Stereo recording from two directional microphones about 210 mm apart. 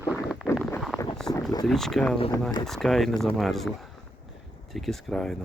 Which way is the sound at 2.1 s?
25° left (ahead or behind).